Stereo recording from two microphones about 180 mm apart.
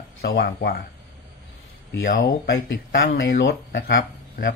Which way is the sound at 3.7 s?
55° left (ahead or behind).